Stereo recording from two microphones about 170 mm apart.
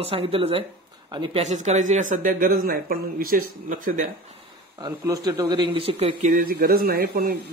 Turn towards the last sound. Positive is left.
turn(degrees=-60)  # may be behind; listen again after turning